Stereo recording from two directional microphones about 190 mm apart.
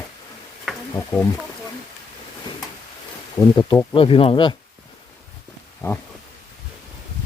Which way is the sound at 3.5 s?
20° left (ahead or behind).